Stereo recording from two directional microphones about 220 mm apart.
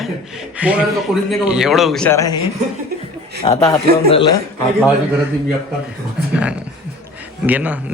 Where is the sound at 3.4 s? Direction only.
20° left (ahead or behind).